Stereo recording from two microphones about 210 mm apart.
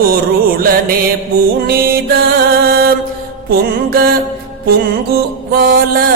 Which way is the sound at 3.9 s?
45° right (ahead or behind).